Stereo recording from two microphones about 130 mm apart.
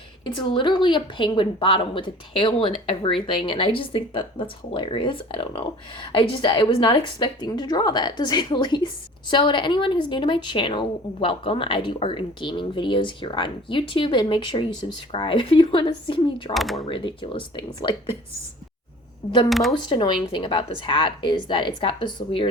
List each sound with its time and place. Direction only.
0.3 s a woman's voice: 35° left (ahead or behind)
16.6 s speech: centre (ahead or behind)
16.8 s a woman's voice: 40° left (ahead or behind)
19.5 s speech: centre (ahead or behind)
19.7 s a woman's voice: 35° left (ahead or behind)